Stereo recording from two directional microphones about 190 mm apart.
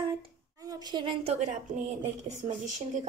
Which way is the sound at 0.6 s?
20° right (ahead or behind).